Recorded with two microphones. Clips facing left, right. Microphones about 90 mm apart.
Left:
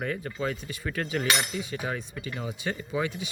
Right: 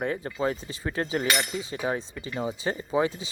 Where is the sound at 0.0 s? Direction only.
30° right (ahead or behind).